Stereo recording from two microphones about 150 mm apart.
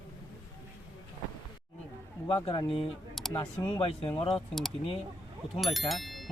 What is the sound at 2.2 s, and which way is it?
Speech, 35° left (ahead or behind).